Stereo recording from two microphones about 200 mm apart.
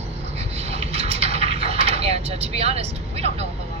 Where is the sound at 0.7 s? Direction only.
30° right (ahead or behind).